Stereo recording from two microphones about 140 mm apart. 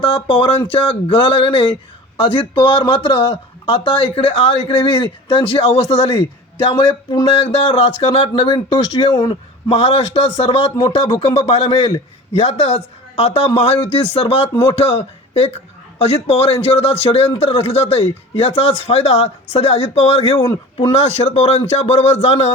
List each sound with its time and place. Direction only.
0.0 s a man's voice: 35° left (ahead or behind)